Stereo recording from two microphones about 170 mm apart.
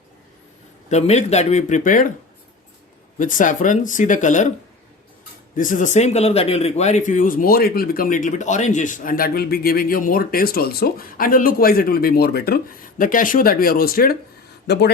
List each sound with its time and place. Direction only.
0.9 s speech: 40° left (ahead or behind)
3.2 s speech: 50° left (ahead or behind)
5.5 s speech: 50° left (ahead or behind)